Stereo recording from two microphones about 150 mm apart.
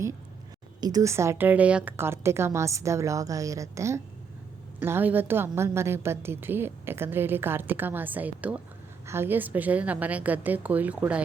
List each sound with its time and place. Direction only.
0.8 s a woman's voice: 25° right (ahead or behind); by 11.2 s 10° right (ahead or behind)